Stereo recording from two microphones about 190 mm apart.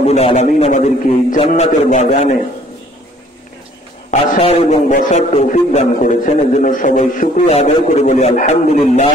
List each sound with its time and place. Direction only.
0.0 s a man's voice: 35° left (ahead or behind)
4.1 s a man's voice: 35° left (ahead or behind)